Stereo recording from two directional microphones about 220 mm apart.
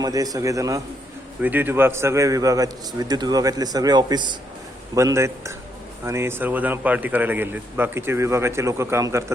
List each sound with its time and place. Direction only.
0.0 s a man's voice: 15° right (ahead or behind)